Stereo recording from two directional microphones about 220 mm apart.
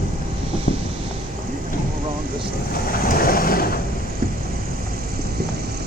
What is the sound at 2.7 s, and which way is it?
Vehicle, 40° left (ahead or behind).